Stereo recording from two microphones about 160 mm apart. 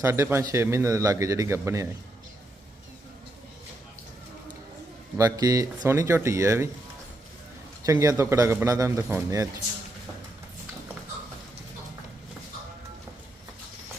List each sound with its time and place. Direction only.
0.0 s a man's voice: 15° right (ahead or behind)
5.1 s speech: 20° right (ahead or behind)
7.9 s speech: 20° right (ahead or behind)